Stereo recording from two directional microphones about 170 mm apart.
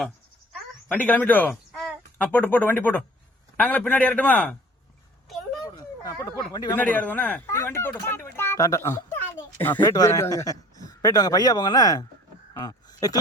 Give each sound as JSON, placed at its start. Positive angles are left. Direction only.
{"t": 0.9, "sound": "speech", "side_deg": 10}
{"t": 6.0, "sound": "speech", "side_deg": 20}
{"t": 6.7, "sound": "speech", "side_deg": 10}
{"t": 12.6, "sound": "a sound", "side_deg": 20}